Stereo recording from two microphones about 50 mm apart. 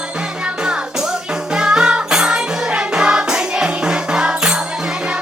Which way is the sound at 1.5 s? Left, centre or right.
Centre.